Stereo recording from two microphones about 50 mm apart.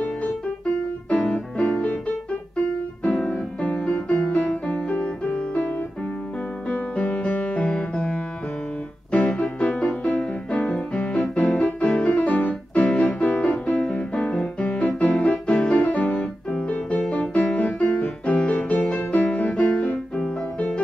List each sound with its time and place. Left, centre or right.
1.1 s music: left
3.3 s music: left
6.7 s music: left